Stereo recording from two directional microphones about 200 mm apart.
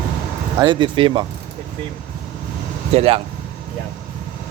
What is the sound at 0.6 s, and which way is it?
Speech, 25° right (ahead or behind).